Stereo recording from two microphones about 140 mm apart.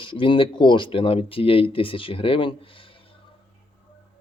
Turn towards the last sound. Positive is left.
turn(degrees=40)  # may be behind; listen again after turning